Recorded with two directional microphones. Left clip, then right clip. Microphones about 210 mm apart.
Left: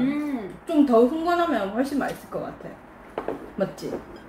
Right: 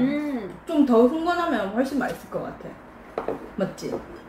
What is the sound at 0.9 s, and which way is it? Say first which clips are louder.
A woman's voice: right 1 dB; 5° right (ahead or behind).